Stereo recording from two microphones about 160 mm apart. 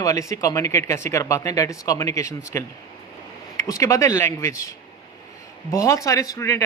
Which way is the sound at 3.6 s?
20° left (ahead or behind).